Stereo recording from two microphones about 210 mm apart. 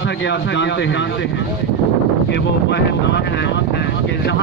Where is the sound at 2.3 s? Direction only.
55° left (ahead or behind).